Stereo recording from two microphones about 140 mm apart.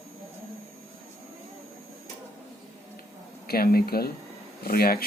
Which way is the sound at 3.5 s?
90° left.